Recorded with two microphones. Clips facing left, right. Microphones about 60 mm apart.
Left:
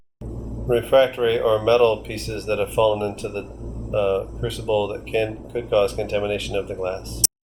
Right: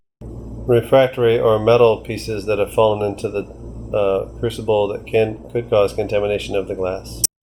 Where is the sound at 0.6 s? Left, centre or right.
Right.